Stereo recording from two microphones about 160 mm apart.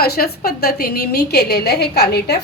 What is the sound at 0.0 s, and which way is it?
A woman's voice, 75° left (ahead or behind).